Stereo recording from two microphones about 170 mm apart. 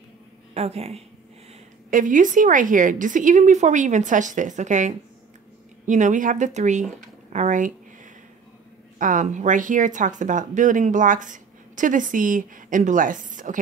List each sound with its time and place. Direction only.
0.6 s a woman's voice: 40° right (ahead or behind)
1.9 s speech: 50° right (ahead or behind)